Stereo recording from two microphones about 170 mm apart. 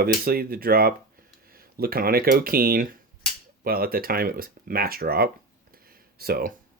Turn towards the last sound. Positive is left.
turn(degrees=-60)  # may be behind; listen again after turning